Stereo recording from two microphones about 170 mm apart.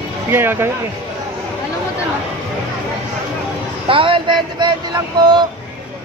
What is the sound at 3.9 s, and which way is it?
Speech, 30° right (ahead or behind).